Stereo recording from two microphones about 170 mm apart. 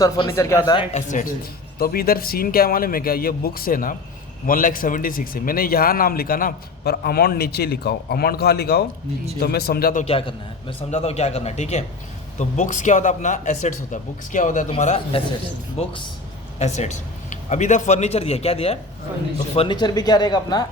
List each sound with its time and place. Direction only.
0.0 s speech: 20° left (ahead or behind)
0.9 s speech: 50° left (ahead or behind)
1.8 s a man's voice: 60° left (ahead or behind)
10.0 s a man's voice: 35° left (ahead or behind)